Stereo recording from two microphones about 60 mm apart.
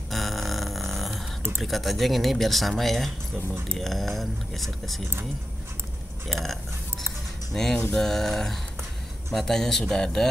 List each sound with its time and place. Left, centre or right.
0.1 s a sound: centre
1.6 s speech: centre
6.2 s speech: centre